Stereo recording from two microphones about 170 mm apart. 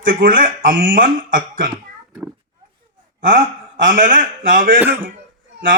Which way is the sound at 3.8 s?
50° right (ahead or behind).